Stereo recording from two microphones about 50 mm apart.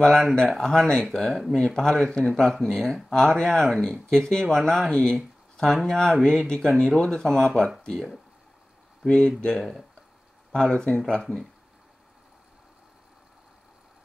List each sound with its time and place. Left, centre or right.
0.2 s speech: centre
0.6 s speech: centre
5.1 s a sound: centre
5.9 s speech: centre
9.0 s speech: centre
9.5 s speech: centre